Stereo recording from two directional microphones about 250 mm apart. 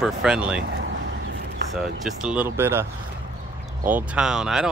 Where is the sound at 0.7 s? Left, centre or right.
Right.